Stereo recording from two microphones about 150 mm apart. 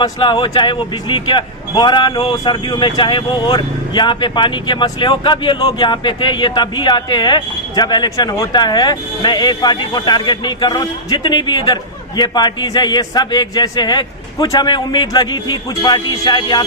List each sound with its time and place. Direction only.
0.0 s speech: 30° left (ahead or behind)